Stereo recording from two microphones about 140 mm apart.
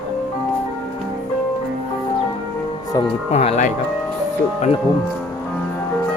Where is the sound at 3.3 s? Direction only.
50° left (ahead or behind).